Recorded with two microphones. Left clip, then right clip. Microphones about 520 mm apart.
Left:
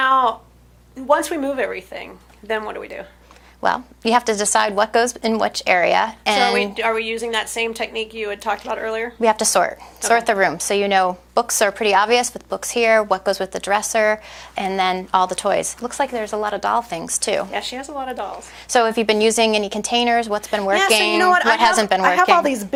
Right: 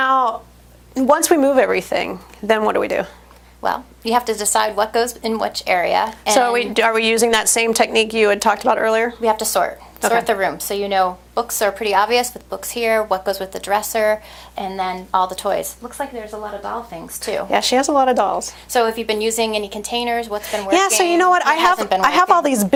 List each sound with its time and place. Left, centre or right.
0.0 s a sound: right
0.9 s a woman's voice: right
3.6 s a woman's voice: left
6.5 s a woman's voice: right
9.2 s a woman's voice: left
16.9 s a woman's voice: left
17.5 s a woman's voice: right
18.7 s a woman's voice: left
21.2 s a woman's voice: right
21.8 s a woman's voice: left
22.0 s speech: centre